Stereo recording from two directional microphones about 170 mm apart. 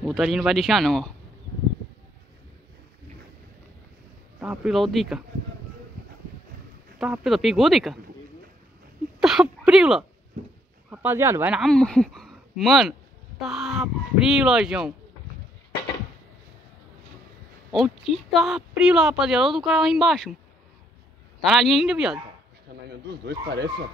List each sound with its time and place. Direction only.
0.0 s speech: centre (ahead or behind)
4.4 s speech: 5° right (ahead or behind)
7.0 s speech: centre (ahead or behind)
9.2 s speech: 5° right (ahead or behind)
11.6 s speech: 5° left (ahead or behind)
17.6 s speech: centre (ahead or behind)
21.4 s speech: centre (ahead or behind)
22.8 s speech: 75° right (ahead or behind)